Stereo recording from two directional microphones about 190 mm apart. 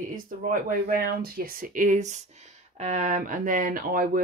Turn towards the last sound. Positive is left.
turn(degrees=-45)  # may be behind; listen again after turning